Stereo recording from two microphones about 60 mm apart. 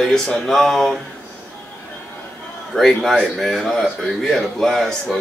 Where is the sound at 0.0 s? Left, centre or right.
Centre.